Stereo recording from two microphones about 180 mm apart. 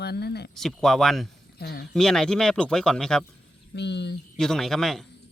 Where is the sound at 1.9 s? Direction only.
5° left (ahead or behind).